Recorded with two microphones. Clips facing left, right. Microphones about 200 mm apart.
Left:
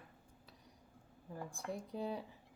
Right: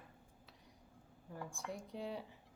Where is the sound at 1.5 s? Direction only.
60° left (ahead or behind).